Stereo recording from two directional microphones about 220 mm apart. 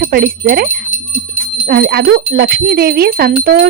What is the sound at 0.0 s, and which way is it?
Speech, 40° right (ahead or behind).